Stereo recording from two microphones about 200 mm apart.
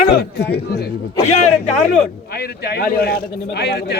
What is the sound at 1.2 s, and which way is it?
Speech, 35° left (ahead or behind).